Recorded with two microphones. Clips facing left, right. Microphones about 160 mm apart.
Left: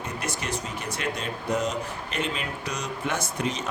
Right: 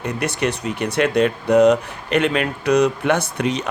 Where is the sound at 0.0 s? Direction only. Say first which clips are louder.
Right 10 dB; 65° right (ahead or behind).